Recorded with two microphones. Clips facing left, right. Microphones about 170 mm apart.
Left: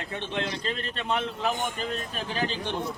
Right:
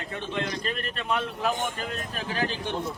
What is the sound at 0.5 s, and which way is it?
Speech, 30° left (ahead or behind).